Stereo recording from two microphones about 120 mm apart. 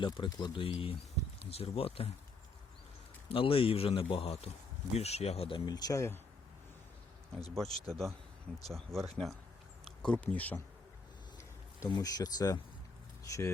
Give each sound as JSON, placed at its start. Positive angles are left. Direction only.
{"t": 0.0, "sound": "speech", "side_deg": 40}
{"t": 0.8, "sound": "speech", "side_deg": 50}
{"t": 3.2, "sound": "speech", "side_deg": 50}
{"t": 5.6, "sound": "speech", "side_deg": 35}
{"t": 7.5, "sound": "speech", "side_deg": 5}
{"t": 11.9, "sound": "speech", "side_deg": 30}